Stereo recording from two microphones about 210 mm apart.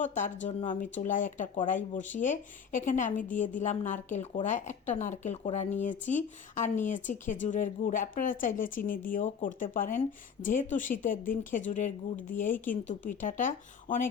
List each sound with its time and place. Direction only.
0.0 s speech: 35° left (ahead or behind)